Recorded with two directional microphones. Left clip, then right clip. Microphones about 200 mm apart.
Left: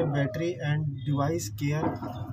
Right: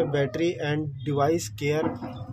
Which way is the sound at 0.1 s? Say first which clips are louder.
Right 5 dB; 50° right (ahead or behind).